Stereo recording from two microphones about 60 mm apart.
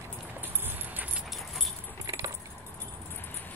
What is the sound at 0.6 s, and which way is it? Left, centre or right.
Keys jangling, right.